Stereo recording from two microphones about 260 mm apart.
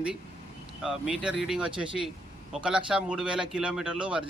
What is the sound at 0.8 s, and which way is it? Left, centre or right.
Speech, centre.